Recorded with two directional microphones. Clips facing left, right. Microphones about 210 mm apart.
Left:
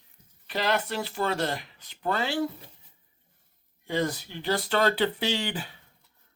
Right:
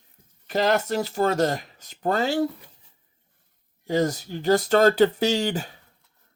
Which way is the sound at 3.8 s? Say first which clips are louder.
Right 5 dB; 40° right (ahead or behind).